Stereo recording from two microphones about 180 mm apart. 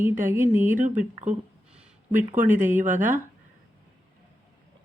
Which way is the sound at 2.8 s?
45° right (ahead or behind).